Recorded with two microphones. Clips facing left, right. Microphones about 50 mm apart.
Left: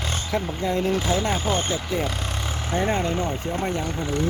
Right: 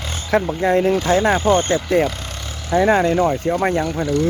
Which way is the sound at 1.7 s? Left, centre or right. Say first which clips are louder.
Right 9 dB; right.